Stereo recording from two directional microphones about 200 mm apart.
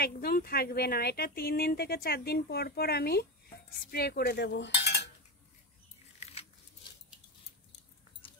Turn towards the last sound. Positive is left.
turn(degrees=30)  # may be behind; listen again after turning